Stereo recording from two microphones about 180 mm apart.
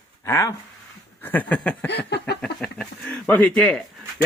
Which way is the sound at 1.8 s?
70° left (ahead or behind).